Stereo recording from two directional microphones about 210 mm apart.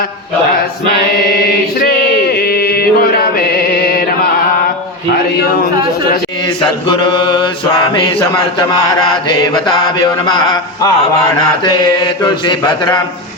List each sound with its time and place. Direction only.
1.8 s mantra: 45° left (ahead or behind)
3.3 s music: 45° left (ahead or behind)
6.6 s mantra: 20° left (ahead or behind)